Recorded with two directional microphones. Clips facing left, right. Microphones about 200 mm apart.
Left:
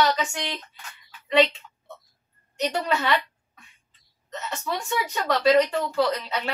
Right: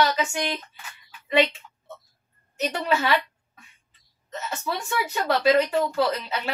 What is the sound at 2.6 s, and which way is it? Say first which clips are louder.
Speech: right 1 dB; 5° right (ahead or behind).